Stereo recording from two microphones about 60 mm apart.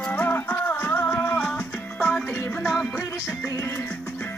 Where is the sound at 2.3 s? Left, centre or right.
Left.